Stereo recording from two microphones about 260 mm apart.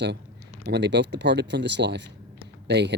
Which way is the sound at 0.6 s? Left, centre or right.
Right.